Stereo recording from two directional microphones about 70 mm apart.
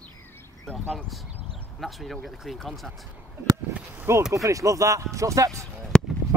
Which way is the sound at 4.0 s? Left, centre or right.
Right.